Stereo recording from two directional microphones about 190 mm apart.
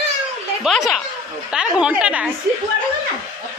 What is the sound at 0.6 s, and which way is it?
A woman's voice, centre (ahead or behind).